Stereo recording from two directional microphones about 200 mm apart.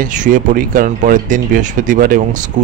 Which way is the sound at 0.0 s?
40° right (ahead or behind).